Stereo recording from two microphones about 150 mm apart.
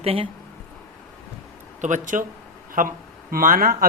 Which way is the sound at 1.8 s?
55° right (ahead or behind).